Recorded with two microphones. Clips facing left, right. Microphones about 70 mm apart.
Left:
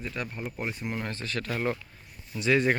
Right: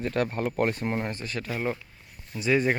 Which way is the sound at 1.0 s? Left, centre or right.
Centre.